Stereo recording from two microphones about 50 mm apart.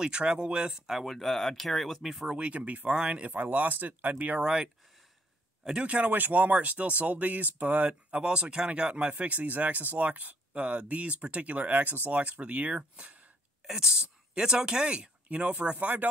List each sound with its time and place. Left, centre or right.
0.0 s speech: centre
0.8 s speech: centre
2.2 s speech: right
5.7 s speech: right
8.2 s speech: centre
13.7 s speech: centre